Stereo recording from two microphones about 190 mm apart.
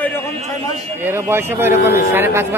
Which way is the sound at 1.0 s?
10° right (ahead or behind).